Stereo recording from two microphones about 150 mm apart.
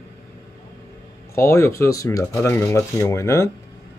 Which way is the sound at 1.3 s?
20° left (ahead or behind).